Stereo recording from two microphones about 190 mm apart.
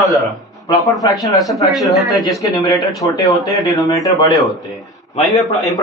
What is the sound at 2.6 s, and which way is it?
Speech, 20° left (ahead or behind).